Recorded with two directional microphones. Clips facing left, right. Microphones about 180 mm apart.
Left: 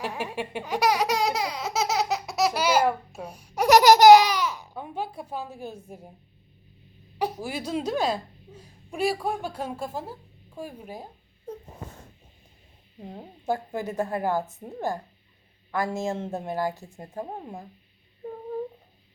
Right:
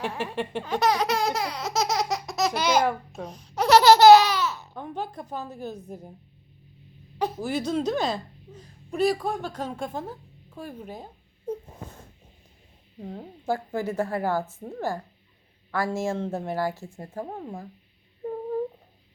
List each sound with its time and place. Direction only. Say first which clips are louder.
0.0 s baby laughter: right 2 dB; 10° left (ahead or behind)
7.2 s speech: right 2 dB; 10° left (ahead or behind)
13.1 s a woman's voice: even; 20° left (ahead or behind)